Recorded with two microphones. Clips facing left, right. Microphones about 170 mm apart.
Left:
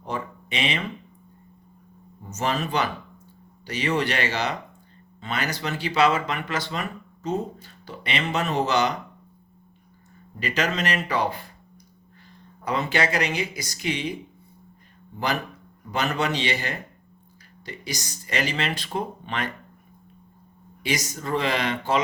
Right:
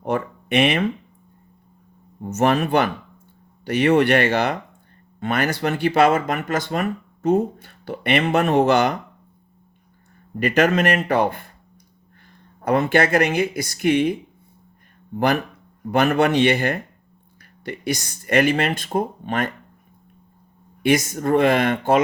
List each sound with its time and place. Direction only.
0.0 s speech: 60° right (ahead or behind)
2.2 s speech: 55° right (ahead or behind)
10.3 s speech: 55° right (ahead or behind)
12.6 s speech: 55° right (ahead or behind)
20.8 s speech: 55° right (ahead or behind)